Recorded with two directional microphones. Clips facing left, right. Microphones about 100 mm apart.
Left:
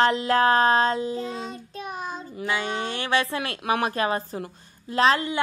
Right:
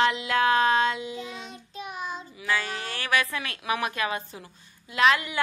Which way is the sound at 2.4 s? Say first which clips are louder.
Left 3 dB; 30° left (ahead or behind).